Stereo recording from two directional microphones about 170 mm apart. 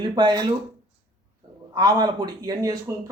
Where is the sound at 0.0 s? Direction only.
25° right (ahead or behind).